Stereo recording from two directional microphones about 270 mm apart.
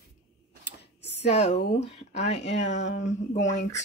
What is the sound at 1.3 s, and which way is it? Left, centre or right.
Speech, left.